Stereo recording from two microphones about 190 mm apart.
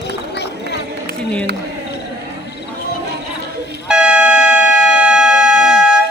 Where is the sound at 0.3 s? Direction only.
60° left (ahead or behind).